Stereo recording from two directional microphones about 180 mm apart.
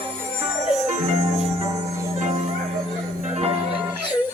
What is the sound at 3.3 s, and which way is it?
Music, 35° right (ahead or behind).